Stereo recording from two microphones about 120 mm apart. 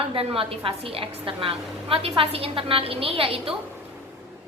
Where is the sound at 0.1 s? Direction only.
50° right (ahead or behind).